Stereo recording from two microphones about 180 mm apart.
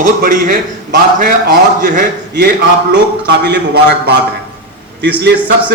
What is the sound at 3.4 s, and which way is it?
A man's voice, 65° right (ahead or behind).